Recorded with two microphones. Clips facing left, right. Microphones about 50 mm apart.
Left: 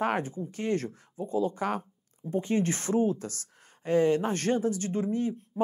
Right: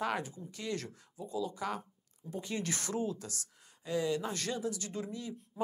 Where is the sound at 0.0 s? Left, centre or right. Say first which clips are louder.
Left 7 dB; left.